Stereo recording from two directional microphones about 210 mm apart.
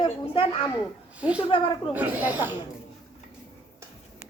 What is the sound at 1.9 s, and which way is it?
Speech, 10° right (ahead or behind).